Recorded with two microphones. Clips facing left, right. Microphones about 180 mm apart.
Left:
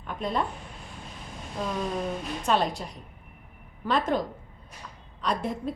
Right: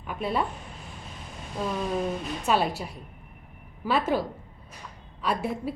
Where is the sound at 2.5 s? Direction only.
5° right (ahead or behind).